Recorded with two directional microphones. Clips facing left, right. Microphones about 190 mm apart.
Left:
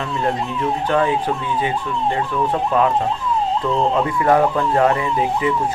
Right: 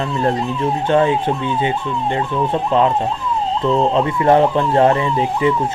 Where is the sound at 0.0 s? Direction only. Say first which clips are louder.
Right 3 dB; 30° right (ahead or behind).